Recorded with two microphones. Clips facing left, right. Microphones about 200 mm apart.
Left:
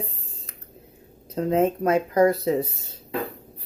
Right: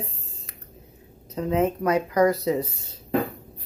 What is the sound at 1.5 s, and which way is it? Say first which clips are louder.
Speech: left 1 dB; 30° left (ahead or behind).